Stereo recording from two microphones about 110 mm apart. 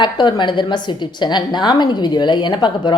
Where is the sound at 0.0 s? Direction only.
45° left (ahead or behind).